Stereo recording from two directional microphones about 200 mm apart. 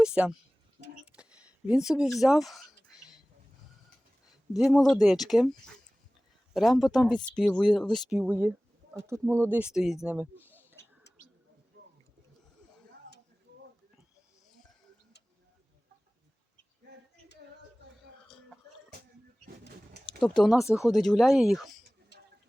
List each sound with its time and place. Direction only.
0.0 s speech: 5° right (ahead or behind)
1.1 s a sound: 5° right (ahead or behind)
4.5 s speech: centre (ahead or behind)
20.4 s speech: centre (ahead or behind)
22.1 s tick-tock: 60° left (ahead or behind)